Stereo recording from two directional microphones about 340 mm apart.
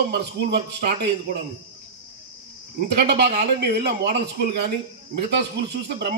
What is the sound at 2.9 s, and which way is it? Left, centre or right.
A man's voice, right.